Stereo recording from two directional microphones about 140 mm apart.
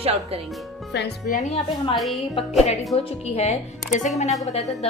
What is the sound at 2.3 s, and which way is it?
A woman's voice, 50° left (ahead or behind).